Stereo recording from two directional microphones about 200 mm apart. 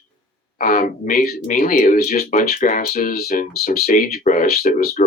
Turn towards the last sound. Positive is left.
turn(degrees=50)  # may be behind; listen again after turning